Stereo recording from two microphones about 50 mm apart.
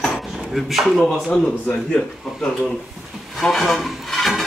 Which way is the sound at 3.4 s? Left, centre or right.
Centre.